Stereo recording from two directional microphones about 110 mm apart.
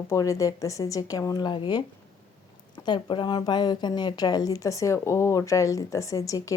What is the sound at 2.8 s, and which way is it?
Speech, 45° left (ahead or behind).